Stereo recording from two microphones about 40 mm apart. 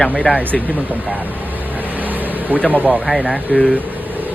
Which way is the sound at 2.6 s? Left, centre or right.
Right.